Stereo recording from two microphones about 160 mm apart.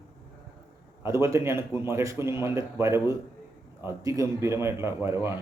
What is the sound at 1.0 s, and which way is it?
Speech, 15° right (ahead or behind).